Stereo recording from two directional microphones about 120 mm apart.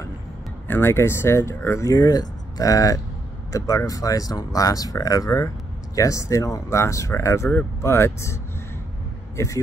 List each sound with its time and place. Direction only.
0.7 s speech: 20° left (ahead or behind)